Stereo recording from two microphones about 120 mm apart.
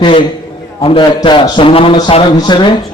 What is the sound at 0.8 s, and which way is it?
A man's voice, 50° left (ahead or behind).